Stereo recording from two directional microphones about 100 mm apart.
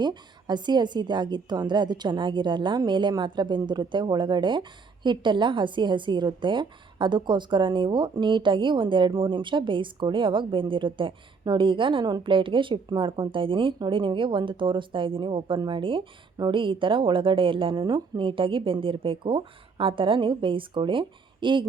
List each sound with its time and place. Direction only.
0.0 s a woman's voice: 45° right (ahead or behind)